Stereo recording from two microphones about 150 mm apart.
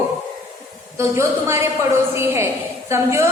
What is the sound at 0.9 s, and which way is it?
A woman's voice, 20° right (ahead or behind).